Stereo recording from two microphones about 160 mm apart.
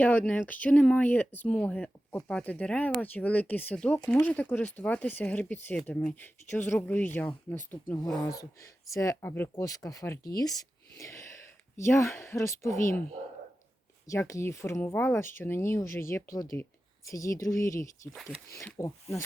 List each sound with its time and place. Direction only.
0.0 s speech: 10° left (ahead or behind)
7.7 s speech: 35° left (ahead or behind)
8.9 s speech: 20° left (ahead or behind)
10.9 s a sound: 20° left (ahead or behind)
11.8 s speech: 15° left (ahead or behind)
12.7 s speech: 60° left (ahead or behind)
14.1 s speech: 20° left (ahead or behind)
18.1 s speech: centre (ahead or behind)
18.5 s speech: 20° left (ahead or behind)